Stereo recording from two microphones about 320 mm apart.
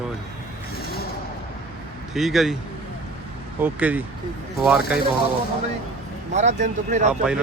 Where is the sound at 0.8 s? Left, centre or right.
Left.